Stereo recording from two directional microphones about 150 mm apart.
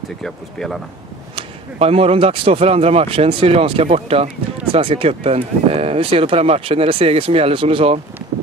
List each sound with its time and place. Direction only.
0.2 s speech: 5° left (ahead or behind)
1.3 s speech: 40° right (ahead or behind)